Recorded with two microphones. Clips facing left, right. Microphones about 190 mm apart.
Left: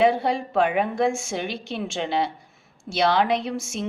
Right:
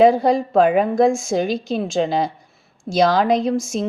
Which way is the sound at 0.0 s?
40° right (ahead or behind).